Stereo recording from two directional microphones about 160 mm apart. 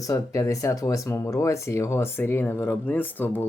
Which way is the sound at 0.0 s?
20° left (ahead or behind).